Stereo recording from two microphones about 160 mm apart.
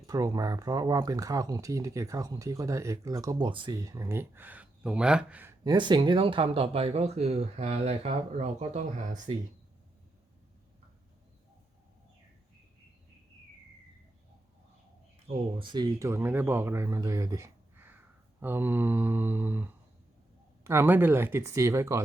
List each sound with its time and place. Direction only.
0.1 s speech: 20° right (ahead or behind)
5.6 s speech: 30° right (ahead or behind); by 9.2 s 50° right (ahead or behind)
15.3 s speech: 30° right (ahead or behind)